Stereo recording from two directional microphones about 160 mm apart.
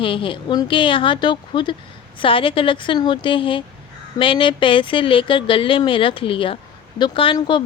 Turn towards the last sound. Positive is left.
turn(degrees=30)  # may be behind; listen again after turning